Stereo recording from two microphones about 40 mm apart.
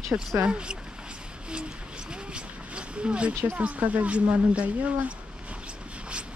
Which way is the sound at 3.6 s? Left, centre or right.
Right.